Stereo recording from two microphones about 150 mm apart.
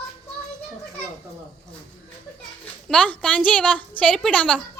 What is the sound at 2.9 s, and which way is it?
Speech, 10° left (ahead or behind).